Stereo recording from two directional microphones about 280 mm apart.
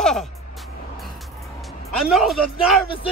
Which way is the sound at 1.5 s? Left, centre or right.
Centre.